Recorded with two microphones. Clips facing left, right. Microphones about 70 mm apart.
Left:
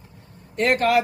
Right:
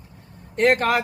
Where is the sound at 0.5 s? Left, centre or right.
Right.